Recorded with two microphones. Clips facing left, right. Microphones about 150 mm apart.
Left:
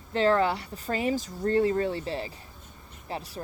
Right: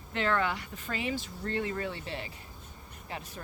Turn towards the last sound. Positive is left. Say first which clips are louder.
# left 6 dB
turn(degrees=35)  # may be behind; listen again after turning